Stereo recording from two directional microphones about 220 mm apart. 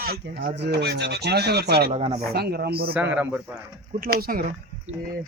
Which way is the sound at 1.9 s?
30° right (ahead or behind).